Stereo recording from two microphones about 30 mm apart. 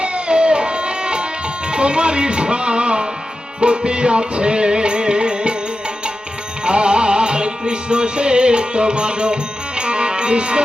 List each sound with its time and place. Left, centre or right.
0.0 s music: right
1.7 s speech: right
3.6 s music: right
6.7 s music: right